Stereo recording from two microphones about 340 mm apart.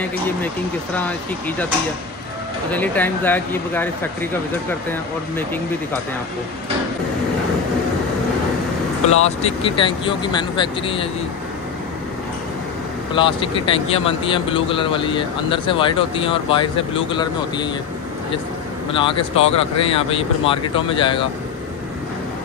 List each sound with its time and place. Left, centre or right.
2.7 s speech: centre
9.0 s speech: centre
13.1 s speech: centre
18.9 s speech: centre